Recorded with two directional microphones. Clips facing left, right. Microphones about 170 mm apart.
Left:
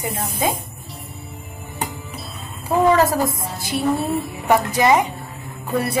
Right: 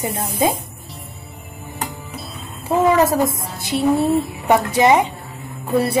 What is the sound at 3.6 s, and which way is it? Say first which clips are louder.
A woman's voice: right 4 dB; 20° right (ahead or behind).